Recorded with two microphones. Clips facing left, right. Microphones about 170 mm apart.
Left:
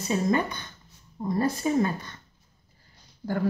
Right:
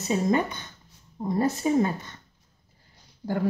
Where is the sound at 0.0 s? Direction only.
20° right (ahead or behind).